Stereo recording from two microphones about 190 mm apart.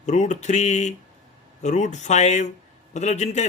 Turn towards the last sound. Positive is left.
turn(degrees=35)  # may be behind; listen again after turning